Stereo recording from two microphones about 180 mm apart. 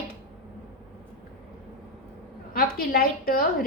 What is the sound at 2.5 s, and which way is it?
A woman's voice, 55° left (ahead or behind).